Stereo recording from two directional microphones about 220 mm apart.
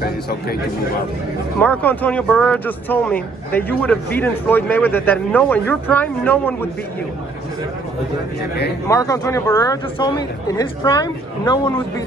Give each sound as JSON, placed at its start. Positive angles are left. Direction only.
{"t": 1.6, "sound": "speech", "side_deg": 5}
{"t": 8.8, "sound": "speech", "side_deg": 15}